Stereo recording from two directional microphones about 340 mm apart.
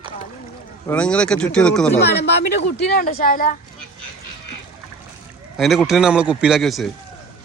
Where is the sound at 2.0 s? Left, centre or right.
Left.